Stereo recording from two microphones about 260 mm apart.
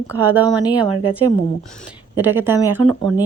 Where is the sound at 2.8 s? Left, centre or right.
Right.